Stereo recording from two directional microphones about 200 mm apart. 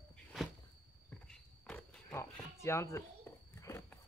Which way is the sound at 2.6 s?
15° left (ahead or behind).